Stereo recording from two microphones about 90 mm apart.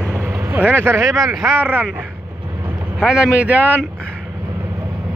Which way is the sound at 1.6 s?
20° right (ahead or behind).